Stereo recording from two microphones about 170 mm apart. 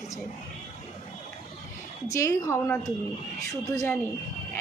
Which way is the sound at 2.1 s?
20° left (ahead or behind).